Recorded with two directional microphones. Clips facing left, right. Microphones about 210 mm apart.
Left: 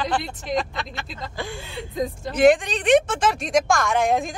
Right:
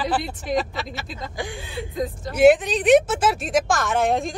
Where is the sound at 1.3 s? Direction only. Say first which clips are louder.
Right 1 dB; 15° right (ahead or behind).